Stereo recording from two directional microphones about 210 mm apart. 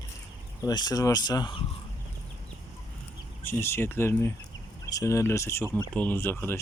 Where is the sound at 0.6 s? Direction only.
20° left (ahead or behind).